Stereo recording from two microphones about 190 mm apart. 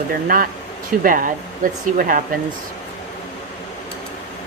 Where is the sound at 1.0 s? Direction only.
45° right (ahead or behind).